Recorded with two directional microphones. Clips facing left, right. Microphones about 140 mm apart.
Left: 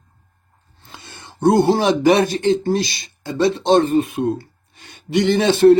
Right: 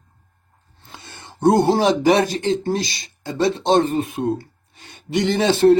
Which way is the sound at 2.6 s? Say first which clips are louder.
Left 3 dB; 45° right (ahead or behind).